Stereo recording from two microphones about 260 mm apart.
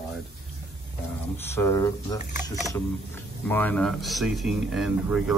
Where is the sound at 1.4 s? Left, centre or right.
Centre.